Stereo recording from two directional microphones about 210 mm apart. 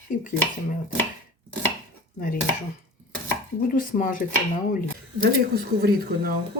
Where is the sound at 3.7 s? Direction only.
40° left (ahead or behind).